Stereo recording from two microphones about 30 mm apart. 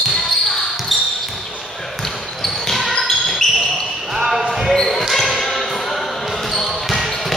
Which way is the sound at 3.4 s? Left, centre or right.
Left.